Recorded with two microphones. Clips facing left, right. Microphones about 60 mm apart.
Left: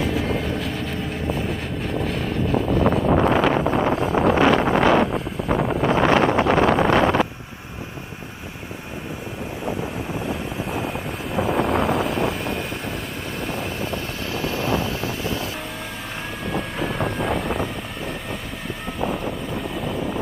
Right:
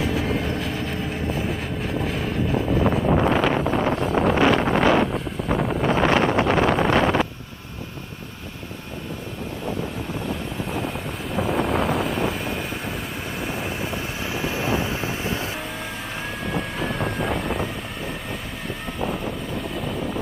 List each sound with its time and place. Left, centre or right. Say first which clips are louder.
0.0 s vehicle: left 1 dB; centre
3.2 s wind noise: left 2 dB; left
3.5 s vehicle: left 2 dB; left
4.1 s wind noise: left 1 dB; left
5.5 s vehicle: left 2 dB; left
5.9 s wind noise: left 2 dB; left
10.2 s vehicle: left 1 dB; centre; by 15.3 s right
16.4 s vehicle: left 2 dB; centre
18.9 s vehicle: left 2 dB; centre